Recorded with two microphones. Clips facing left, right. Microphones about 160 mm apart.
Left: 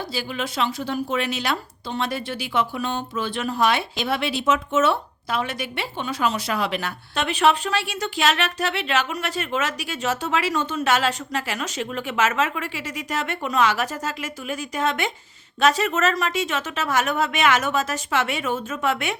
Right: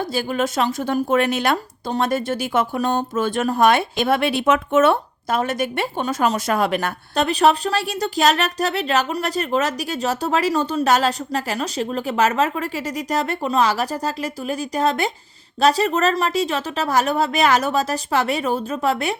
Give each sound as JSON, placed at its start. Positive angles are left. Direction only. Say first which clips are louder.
{"t": 0.1, "sound": "a woman's voice", "louder": "right 7 dB", "side_deg": -50}